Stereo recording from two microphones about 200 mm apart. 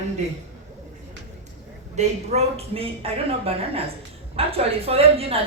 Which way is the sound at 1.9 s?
35° right (ahead or behind).